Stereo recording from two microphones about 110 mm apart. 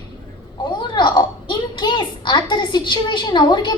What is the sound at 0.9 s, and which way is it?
A woman's voice, 45° left (ahead or behind).